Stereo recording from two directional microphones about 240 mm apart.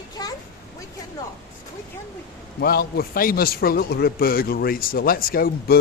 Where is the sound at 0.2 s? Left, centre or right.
Centre.